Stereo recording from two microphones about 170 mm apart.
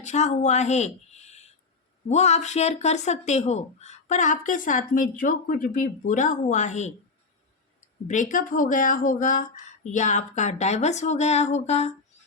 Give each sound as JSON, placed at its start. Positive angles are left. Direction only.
{"t": 0.0, "sound": "a woman's voice", "side_deg": 45}